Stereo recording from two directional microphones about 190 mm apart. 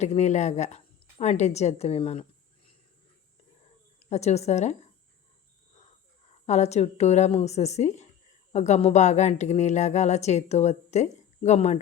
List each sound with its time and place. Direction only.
0.0 s a woman's voice: 35° left (ahead or behind)
4.1 s a woman's voice: 35° left (ahead or behind)
6.4 s a woman's voice: 35° left (ahead or behind)